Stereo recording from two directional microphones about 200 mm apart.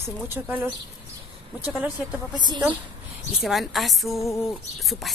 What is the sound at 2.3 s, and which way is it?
Speech, 20° right (ahead or behind).